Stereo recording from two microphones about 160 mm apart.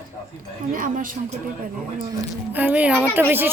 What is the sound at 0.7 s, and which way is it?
Speech, 60° right (ahead or behind).